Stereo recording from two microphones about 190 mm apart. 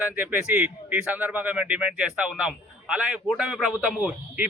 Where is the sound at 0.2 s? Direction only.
10° right (ahead or behind).